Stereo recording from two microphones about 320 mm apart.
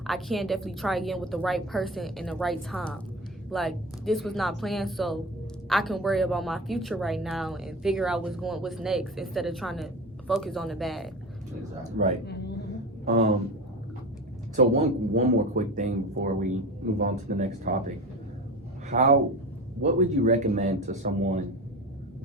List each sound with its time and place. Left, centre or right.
0.0 s speech: centre
11.8 s speech: right
14.5 s a man's voice: right